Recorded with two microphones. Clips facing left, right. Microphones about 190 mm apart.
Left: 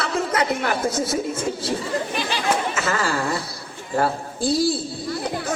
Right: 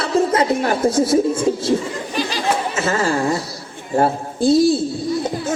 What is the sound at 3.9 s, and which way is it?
Speech, 25° right (ahead or behind).